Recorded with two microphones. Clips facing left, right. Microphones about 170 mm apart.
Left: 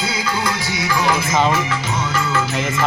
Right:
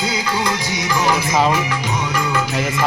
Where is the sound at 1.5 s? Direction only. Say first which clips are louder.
Right 1 dB; 15° right (ahead or behind).